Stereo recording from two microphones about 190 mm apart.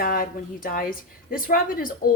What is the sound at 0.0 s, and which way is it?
Speech, 50° left (ahead or behind).